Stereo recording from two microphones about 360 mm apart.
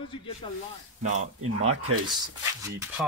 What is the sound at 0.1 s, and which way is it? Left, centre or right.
Speech, centre.